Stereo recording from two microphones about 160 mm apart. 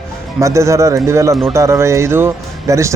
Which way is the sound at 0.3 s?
20° right (ahead or behind).